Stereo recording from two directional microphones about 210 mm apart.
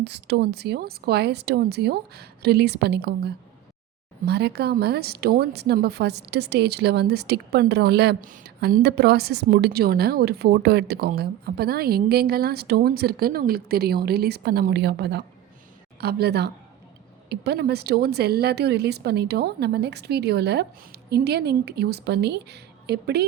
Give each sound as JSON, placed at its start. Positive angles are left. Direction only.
{"t": 0.0, "sound": "speech", "side_deg": -55}